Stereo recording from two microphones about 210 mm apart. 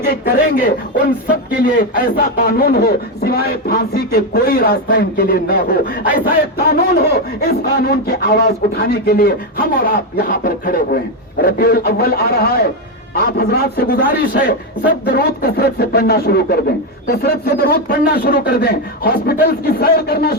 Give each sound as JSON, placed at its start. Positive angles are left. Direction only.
{"t": 0.0, "sound": "a man's voice", "side_deg": 45}